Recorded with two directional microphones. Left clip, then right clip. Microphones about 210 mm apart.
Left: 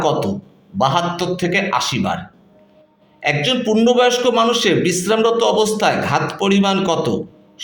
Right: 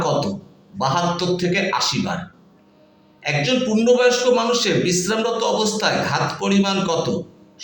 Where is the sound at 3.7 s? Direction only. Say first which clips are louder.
Left 2 dB; 55° left (ahead or behind).